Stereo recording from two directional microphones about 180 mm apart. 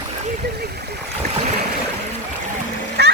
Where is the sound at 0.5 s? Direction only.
60° right (ahead or behind).